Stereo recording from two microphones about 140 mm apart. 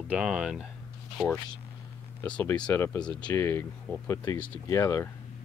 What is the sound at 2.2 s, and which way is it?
Speech, 15° left (ahead or behind).